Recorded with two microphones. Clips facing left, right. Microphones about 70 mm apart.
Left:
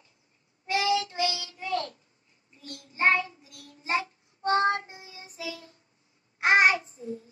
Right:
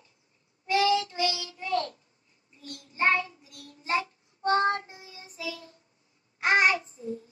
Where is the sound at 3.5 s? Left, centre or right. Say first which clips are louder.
Right 1 dB; right.